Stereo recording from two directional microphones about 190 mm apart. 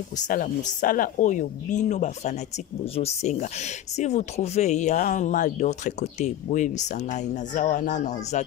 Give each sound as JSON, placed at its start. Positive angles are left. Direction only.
{"t": 0.2, "sound": "speech", "side_deg": 40}